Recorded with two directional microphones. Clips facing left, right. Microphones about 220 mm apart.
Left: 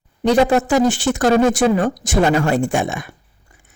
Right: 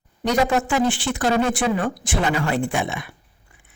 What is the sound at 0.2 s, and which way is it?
A man's voice, 30° left (ahead or behind).